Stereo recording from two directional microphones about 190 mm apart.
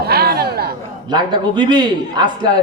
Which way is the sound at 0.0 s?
55° right (ahead or behind).